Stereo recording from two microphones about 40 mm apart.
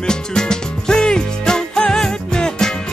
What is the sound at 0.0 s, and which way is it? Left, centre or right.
Music, centre.